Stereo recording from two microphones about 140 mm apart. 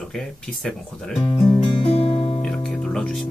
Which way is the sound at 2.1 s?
40° left (ahead or behind).